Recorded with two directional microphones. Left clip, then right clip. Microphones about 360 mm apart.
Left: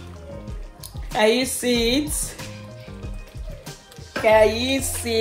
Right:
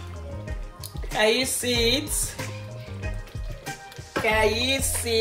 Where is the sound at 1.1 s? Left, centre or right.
Centre.